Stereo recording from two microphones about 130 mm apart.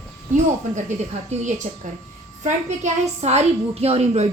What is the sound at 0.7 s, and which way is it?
A woman's voice, 60° right (ahead or behind).